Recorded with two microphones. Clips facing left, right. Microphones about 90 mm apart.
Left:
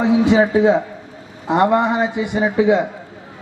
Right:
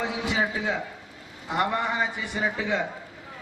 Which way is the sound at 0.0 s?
25° left (ahead or behind).